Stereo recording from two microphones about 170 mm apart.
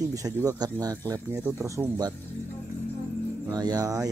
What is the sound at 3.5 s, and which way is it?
Speech, 20° right (ahead or behind).